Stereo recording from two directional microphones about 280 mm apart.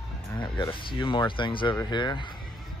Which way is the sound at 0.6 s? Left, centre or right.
Centre.